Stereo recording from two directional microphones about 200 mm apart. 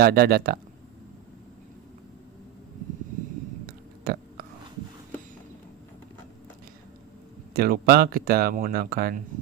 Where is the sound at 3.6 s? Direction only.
50° right (ahead or behind).